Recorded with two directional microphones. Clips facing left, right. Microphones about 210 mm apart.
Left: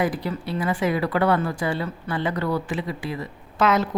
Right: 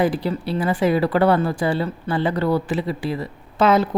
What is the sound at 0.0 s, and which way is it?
Speech, 30° right (ahead or behind).